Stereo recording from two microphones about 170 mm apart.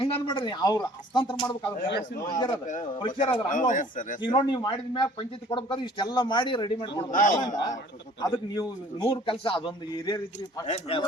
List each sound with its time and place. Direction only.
0.0 s a man's voice: 30° left (ahead or behind)
1.9 s a man's voice: 80° left
2.2 s a man's voice: 25° left (ahead or behind)
3.5 s speech: 50° left (ahead or behind)
4.2 s a man's voice: 25° left (ahead or behind)
7.1 s speech: 50° left (ahead or behind)
7.4 s a man's voice: 20° left (ahead or behind)